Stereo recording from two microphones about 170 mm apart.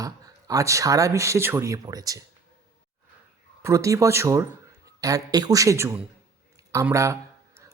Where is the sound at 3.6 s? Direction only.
20° right (ahead or behind).